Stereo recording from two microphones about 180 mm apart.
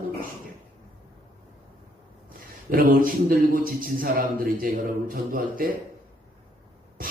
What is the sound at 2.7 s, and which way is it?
A man's voice, 50° right (ahead or behind).